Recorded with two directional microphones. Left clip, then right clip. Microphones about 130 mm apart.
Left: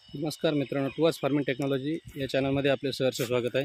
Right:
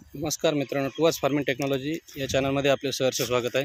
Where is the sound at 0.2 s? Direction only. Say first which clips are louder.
Right 3 dB; 10° left (ahead or behind).